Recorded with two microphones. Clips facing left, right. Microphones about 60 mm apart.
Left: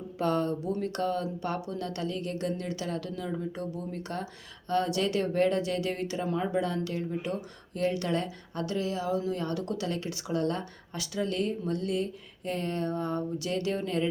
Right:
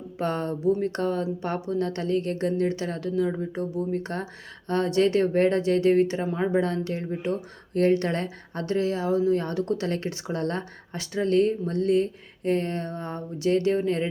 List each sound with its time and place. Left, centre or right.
0.2 s speech: right